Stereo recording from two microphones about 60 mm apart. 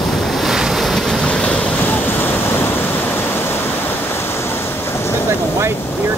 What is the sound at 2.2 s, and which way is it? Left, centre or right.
Waves, left.